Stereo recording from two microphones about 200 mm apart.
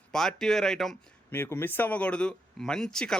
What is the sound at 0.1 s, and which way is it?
Speech, centre (ahead or behind).